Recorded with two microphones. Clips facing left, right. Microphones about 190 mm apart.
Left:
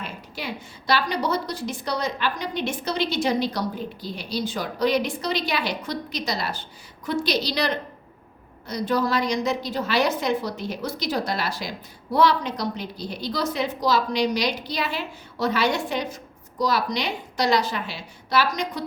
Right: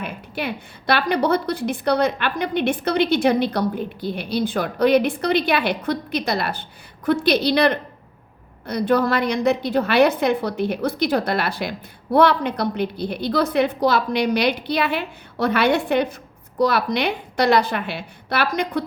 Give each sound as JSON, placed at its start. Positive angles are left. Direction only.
{"t": 0.0, "sound": "a woman's voice", "side_deg": -60}